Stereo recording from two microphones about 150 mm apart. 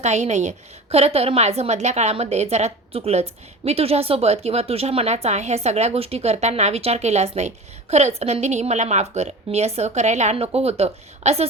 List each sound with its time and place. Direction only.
0.0 s a woman's voice: 50° right (ahead or behind)